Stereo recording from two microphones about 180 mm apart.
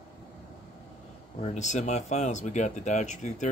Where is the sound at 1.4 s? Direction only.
40° left (ahead or behind).